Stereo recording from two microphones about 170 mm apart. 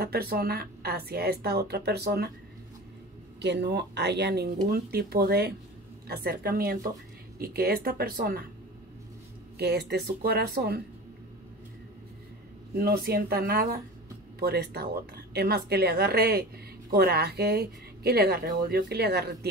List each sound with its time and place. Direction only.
0.0 s a woman's voice: 65° right (ahead or behind)
3.3 s a woman's voice: 90° right; by 8.5 s 60° right (ahead or behind)
9.6 s a woman's voice: 75° right (ahead or behind)
12.7 s a woman's voice: 65° right (ahead or behind)